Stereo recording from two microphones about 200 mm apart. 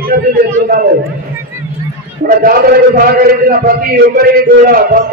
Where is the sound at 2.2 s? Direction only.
45° right (ahead or behind).